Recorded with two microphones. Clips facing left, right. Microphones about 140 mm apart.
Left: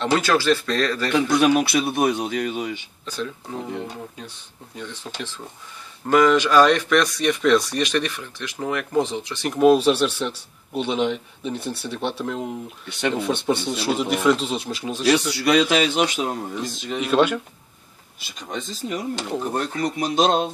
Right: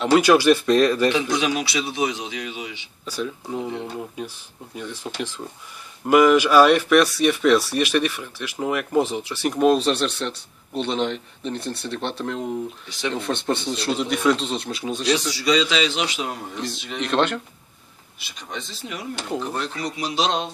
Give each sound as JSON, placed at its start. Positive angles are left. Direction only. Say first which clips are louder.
{"t": 0.0, "sound": "speech", "louder": "right 4 dB", "side_deg": -10}
{"t": 1.3, "sound": "speech", "louder": "left 5 dB", "side_deg": 55}
{"t": 3.1, "sound": "speech", "louder": "right 2 dB", "side_deg": -5}
{"t": 12.8, "sound": "speech", "louder": "left 3 dB", "side_deg": 60}
{"t": 13.1, "sound": "speech", "louder": "left 2 dB", "side_deg": 5}
{"t": 15.3, "sound": "speech", "louder": "left 3 dB", "side_deg": 60}
{"t": 16.9, "sound": "speech", "louder": "left 3 dB", "side_deg": 5}
{"t": 18.2, "sound": "speech", "louder": "left 3 dB", "side_deg": 45}